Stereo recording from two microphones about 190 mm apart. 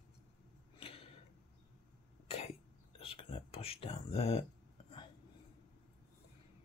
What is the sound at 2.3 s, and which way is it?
Cough, 30° left (ahead or behind).